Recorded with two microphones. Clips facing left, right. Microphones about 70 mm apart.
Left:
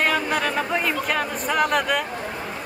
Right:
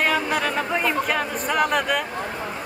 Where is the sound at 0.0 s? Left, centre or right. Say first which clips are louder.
Even; centre.